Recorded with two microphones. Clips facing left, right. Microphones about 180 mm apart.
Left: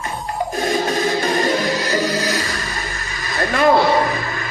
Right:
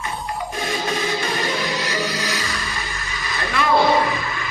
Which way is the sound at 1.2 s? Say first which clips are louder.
Left 6 dB; 40° left (ahead or behind).